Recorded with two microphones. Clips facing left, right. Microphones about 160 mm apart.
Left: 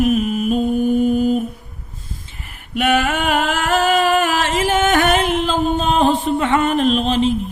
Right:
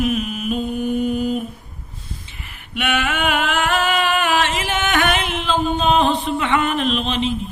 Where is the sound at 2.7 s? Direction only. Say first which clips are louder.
Left 5 dB; 40° left (ahead or behind).